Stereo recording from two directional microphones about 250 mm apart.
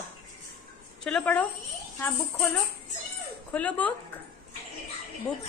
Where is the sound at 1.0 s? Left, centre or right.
Centre.